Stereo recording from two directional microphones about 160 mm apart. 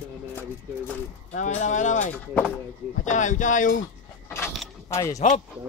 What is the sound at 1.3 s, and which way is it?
Speech, 50° left (ahead or behind).